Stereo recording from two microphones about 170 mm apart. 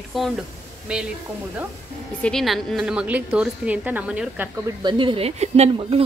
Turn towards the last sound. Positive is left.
turn(degrees=-40)  # may be behind; listen again after turning